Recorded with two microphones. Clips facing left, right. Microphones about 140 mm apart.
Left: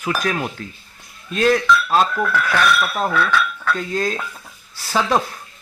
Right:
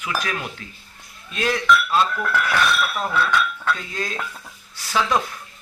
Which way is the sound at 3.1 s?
20° right (ahead or behind).